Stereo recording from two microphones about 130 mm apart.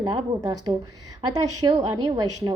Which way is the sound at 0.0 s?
30° right (ahead or behind).